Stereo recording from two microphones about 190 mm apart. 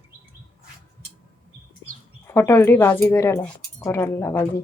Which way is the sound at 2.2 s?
15° left (ahead or behind).